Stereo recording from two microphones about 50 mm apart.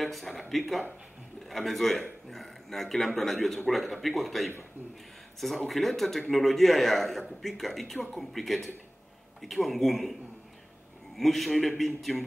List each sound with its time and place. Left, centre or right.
0.0 s a man's voice: centre
5.7 s a man's voice: centre
11.1 s a man's voice: centre